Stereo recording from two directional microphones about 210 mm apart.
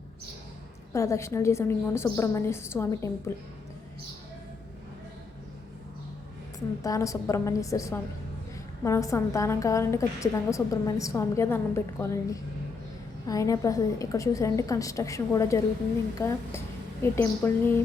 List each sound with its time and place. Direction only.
0.9 s a woman's voice: 15° left (ahead or behind)
6.8 s a woman's voice: 15° left (ahead or behind)